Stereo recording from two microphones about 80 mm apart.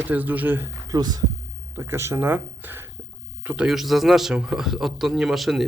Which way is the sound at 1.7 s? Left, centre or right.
Right.